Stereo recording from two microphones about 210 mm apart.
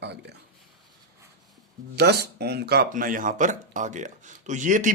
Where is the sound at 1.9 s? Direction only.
50° right (ahead or behind).